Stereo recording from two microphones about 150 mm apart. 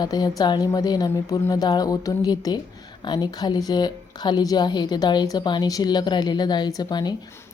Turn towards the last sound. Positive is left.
turn(degrees=25)  # may be behind; listen again after turning